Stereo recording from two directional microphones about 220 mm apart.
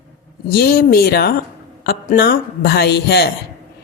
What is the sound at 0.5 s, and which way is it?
A woman's voice, 45° left (ahead or behind).